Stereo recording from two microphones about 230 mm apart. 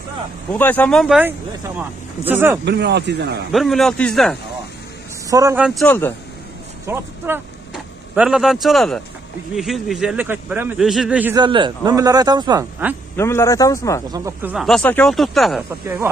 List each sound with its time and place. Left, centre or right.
0.5 s speech: centre
2.6 s speech: right
3.5 s speech: centre
5.3 s speech: centre
5.8 s speech: centre
6.9 s speech: centre
11.3 s speech: centre
13.1 s speech: centre
14.0 s speech: centre